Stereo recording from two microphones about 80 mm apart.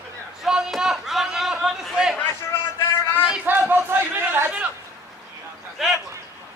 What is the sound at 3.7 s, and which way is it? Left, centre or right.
Chatter, right.